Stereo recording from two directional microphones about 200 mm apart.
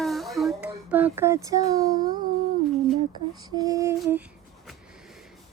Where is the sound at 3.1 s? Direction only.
20° right (ahead or behind).